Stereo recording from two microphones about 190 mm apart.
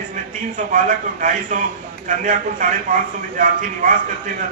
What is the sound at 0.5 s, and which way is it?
A man's voice, 45° right (ahead or behind).